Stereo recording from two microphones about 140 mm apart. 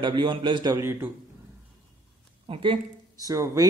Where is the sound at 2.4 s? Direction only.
40° right (ahead or behind).